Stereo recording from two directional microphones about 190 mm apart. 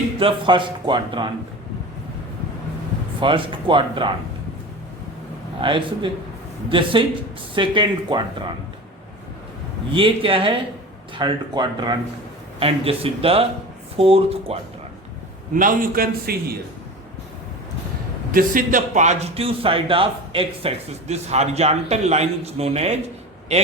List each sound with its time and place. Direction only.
0.2 s speech: 25° right (ahead or behind)
3.2 s speech: 25° right (ahead or behind)
5.6 s speech: 25° right (ahead or behind)
9.9 s a man's voice: 30° right (ahead or behind)
15.5 s a man's voice: 45° right (ahead or behind)
18.3 s a man's voice: 45° right (ahead or behind)